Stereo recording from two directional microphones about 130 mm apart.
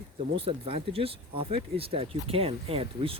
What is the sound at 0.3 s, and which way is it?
Speech, 45° right (ahead or behind).